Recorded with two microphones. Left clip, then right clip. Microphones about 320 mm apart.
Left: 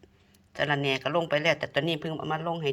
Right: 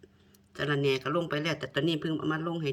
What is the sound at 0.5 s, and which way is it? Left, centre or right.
Speech, right.